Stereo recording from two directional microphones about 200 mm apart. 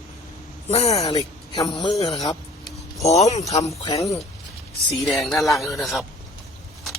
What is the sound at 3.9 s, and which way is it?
Speech, 15° left (ahead or behind).